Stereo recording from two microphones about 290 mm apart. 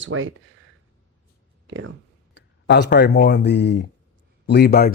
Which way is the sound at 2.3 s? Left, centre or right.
Left.